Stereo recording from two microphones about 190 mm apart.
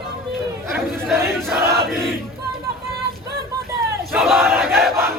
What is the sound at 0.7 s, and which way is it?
Chatter, 10° right (ahead or behind).